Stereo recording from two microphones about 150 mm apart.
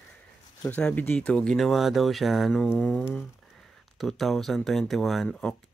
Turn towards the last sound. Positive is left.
turn(degrees=0)  # may be behind; listen again after turning